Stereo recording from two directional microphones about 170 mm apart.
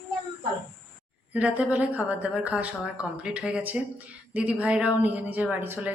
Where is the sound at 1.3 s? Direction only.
10° right (ahead or behind).